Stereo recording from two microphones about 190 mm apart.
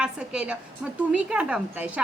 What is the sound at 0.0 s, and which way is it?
A woman's voice, 5° right (ahead or behind).